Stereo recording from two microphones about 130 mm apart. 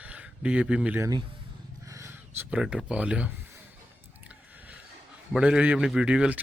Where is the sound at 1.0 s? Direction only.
30° right (ahead or behind); by 3.3 s 10° right (ahead or behind).